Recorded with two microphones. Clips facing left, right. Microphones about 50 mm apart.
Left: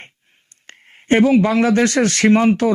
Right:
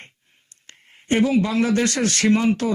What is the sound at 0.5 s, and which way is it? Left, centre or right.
Speech, left.